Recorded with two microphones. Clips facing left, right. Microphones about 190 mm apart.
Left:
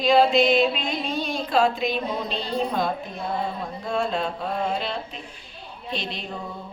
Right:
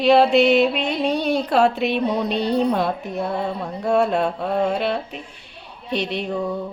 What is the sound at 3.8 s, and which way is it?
Mantra, 65° right (ahead or behind).